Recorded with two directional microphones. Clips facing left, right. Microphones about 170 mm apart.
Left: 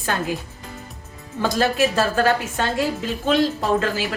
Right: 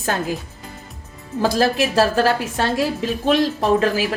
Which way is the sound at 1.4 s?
35° right (ahead or behind).